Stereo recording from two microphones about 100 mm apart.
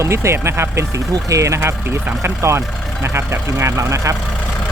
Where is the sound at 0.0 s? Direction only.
30° right (ahead or behind).